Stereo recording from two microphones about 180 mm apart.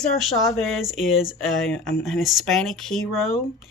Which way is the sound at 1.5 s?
5° left (ahead or behind).